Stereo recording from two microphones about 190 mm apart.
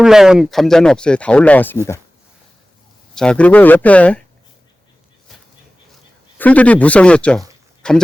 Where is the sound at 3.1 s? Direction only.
5° left (ahead or behind).